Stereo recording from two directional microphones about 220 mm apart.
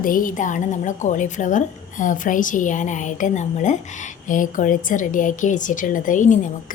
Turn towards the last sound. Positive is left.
turn(degrees=35)  # may be behind; listen again after turning